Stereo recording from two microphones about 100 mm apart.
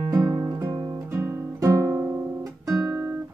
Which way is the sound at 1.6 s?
35° right (ahead or behind).